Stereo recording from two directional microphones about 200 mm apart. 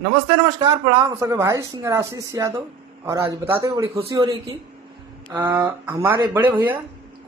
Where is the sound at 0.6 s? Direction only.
20° right (ahead or behind).